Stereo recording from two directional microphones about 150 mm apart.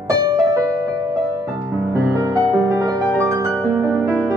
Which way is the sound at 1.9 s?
20° right (ahead or behind).